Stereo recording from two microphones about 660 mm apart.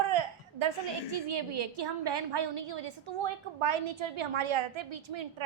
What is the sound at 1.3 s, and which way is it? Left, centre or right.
A woman's voice, right.